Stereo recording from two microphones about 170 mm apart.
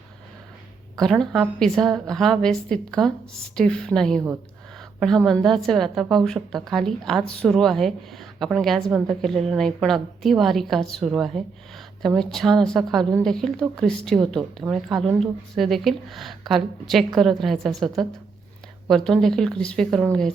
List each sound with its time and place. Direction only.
0.9 s a woman's voice: 5° left (ahead or behind)